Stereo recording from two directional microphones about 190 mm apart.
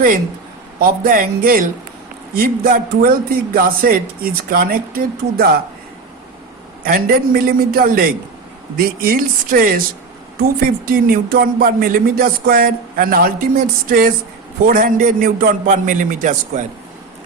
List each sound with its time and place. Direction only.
0.8 s speech: 50° right (ahead or behind)
6.8 s speech: 50° right (ahead or behind)